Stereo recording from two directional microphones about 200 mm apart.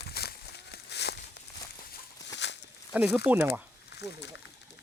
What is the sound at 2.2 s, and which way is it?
Walk, 60° left (ahead or behind).